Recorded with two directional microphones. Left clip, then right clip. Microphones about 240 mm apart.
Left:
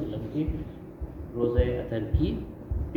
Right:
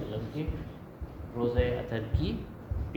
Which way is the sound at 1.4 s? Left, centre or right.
Right.